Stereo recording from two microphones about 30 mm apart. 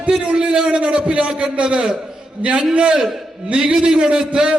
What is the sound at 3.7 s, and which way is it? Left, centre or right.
Speech, right.